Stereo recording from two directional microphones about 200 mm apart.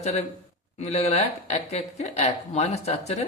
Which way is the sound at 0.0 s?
30° left (ahead or behind).